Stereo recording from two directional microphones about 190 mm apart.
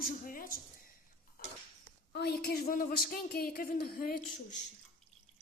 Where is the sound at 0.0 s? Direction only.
50° left (ahead or behind).